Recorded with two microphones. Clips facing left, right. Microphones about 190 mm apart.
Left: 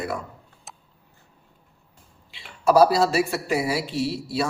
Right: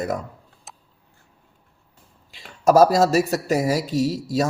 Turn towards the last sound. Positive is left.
turn(degrees=-40)  # may be behind; listen again after turning